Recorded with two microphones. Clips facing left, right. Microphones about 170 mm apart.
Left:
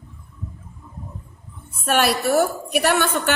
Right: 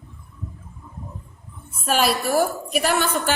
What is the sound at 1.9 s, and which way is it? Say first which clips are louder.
A woman's voice: left 2 dB; 65° left (ahead or behind).